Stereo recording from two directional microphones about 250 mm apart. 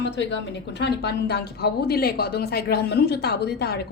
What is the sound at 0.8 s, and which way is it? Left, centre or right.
A woman's voice, left.